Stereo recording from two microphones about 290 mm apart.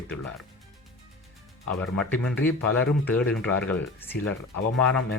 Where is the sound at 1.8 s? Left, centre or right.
Centre.